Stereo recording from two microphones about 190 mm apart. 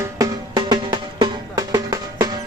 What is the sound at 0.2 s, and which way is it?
Music, 20° right (ahead or behind).